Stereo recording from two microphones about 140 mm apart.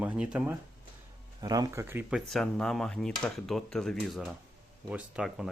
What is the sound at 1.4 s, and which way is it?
Speech, 25° right (ahead or behind).